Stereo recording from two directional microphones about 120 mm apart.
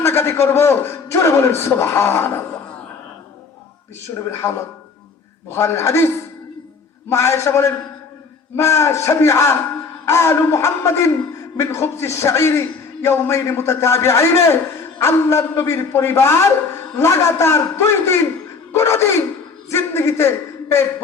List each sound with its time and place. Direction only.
0.0 s a man's voice: 20° left (ahead or behind)
4.2 s a man's voice: 25° left (ahead or behind)
7.1 s a man's voice: 25° left (ahead or behind)